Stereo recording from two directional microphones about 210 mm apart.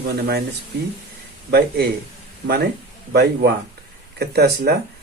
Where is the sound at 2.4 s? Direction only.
50° right (ahead or behind).